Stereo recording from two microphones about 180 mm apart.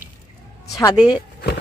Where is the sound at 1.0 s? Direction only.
5° right (ahead or behind).